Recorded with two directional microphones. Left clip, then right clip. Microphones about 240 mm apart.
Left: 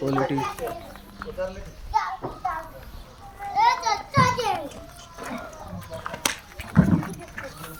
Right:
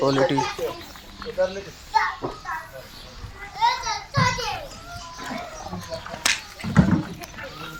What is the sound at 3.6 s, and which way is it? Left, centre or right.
Children playing, left.